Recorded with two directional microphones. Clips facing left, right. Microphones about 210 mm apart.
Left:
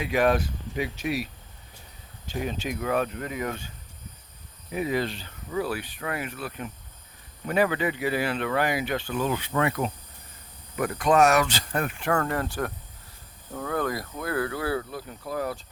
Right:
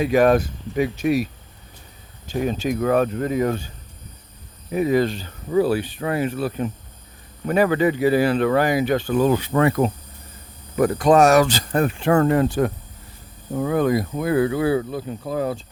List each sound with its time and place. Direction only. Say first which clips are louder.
0.0 s speech: right 7 dB; 40° right (ahead or behind)
4.7 s speech: right 8 dB; 45° right (ahead or behind); by 15.6 s 25° right (ahead or behind)